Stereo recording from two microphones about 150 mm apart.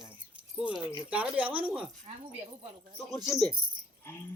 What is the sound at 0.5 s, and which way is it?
Speech, 5° right (ahead or behind).